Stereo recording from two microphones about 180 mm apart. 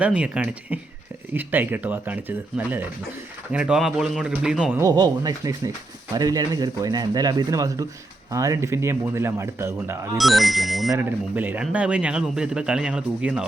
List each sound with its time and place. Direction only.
0.0 s a man's voice: 5° right (ahead or behind)
4.8 s a man's voice: 20° right (ahead or behind)
10.2 s a man's voice: centre (ahead or behind)